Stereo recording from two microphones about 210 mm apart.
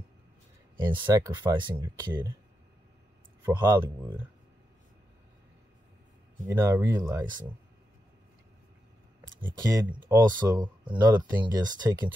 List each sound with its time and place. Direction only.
0.7 s speech: 20° right (ahead or behind)
3.4 s speech: 20° right (ahead or behind)
6.4 s speech: 15° right (ahead or behind)
9.6 s speech: 15° right (ahead or behind)